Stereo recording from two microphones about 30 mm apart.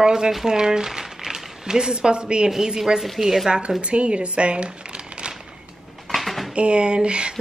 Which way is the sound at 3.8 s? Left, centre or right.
Right.